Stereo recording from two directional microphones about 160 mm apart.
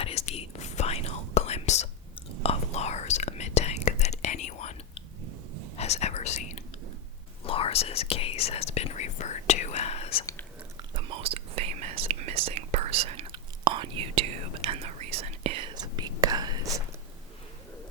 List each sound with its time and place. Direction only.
0.0 s whispering: 40° left (ahead or behind)
7.4 s whispering: 35° left (ahead or behind)
10.8 s whispering: 35° right (ahead or behind)